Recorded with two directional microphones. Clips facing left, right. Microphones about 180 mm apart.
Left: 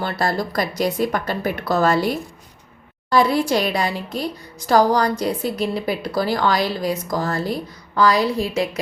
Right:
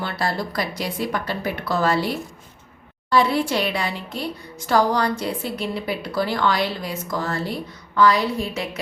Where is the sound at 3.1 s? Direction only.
40° left (ahead or behind).